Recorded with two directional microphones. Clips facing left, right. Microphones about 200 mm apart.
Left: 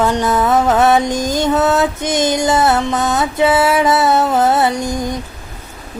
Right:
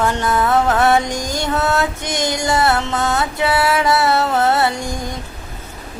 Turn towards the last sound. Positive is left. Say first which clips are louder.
# left 4 dB
turn(degrees=20)  # may be behind; listen again after turning